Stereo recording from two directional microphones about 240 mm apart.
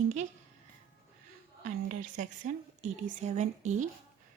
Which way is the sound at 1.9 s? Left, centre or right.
Right.